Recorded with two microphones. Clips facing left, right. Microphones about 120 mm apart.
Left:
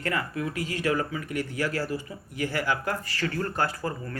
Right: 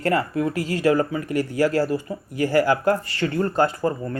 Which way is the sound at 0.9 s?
50° right (ahead or behind).